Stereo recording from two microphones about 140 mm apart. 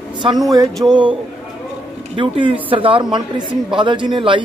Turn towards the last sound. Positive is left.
turn(degrees=-35)  # may be behind; listen again after turning